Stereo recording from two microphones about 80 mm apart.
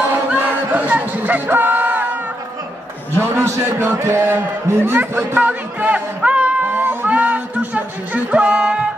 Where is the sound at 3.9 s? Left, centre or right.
Right; by 8.9 s centre.